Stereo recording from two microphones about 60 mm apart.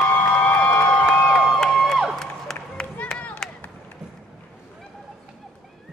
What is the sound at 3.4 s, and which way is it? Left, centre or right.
Run, centre.